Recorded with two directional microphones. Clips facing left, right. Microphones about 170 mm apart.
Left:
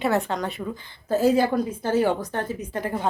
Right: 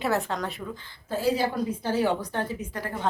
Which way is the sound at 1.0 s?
45° left (ahead or behind).